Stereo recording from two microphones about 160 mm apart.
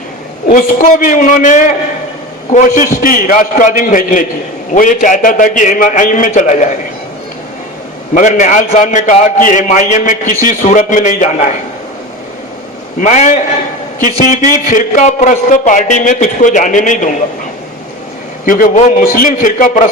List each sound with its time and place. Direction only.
0.5 s a man's voice: 60° left (ahead or behind)
8.1 s a man's voice: 50° left (ahead or behind)
13.0 s a man's voice: 50° left (ahead or behind)
18.4 s a man's voice: 55° left (ahead or behind)